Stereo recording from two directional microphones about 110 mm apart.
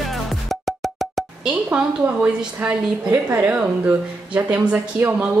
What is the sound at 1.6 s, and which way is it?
A woman's voice, 15° right (ahead or behind).